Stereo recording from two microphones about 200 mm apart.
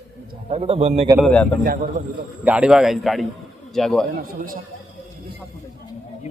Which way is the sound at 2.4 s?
5° right (ahead or behind).